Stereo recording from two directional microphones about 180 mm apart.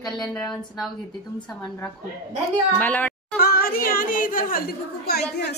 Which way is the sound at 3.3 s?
55° left (ahead or behind).